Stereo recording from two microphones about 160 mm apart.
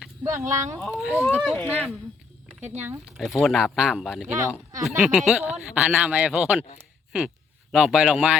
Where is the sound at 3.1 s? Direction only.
Centre (ahead or behind).